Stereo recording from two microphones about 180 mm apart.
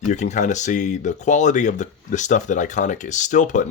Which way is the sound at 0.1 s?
40° left (ahead or behind).